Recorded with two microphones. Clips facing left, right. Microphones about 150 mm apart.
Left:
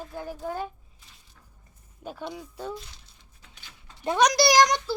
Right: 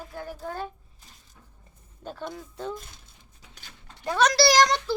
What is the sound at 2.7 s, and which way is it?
Speech, 50° right (ahead or behind).